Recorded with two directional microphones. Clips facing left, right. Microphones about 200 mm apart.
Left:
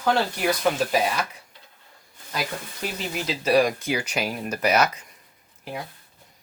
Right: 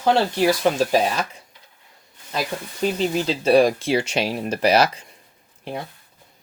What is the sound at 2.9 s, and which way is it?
Speech, 30° right (ahead or behind).